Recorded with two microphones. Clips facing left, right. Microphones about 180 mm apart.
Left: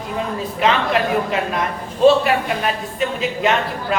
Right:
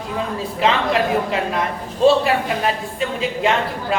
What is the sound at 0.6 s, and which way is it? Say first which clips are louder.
A woman's voice: even; 25° right (ahead or behind).